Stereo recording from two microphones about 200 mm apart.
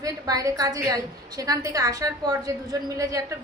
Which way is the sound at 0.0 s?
15° right (ahead or behind).